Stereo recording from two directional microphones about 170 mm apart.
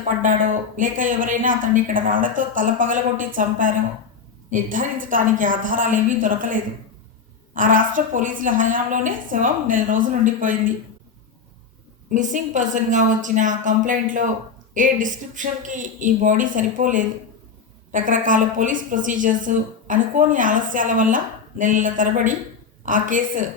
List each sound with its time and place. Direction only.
0.2 s a woman's voice: 50° right (ahead or behind)
12.1 s a woman's voice: 50° right (ahead or behind)